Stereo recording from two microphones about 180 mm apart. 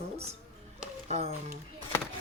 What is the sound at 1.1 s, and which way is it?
Speech, 35° right (ahead or behind).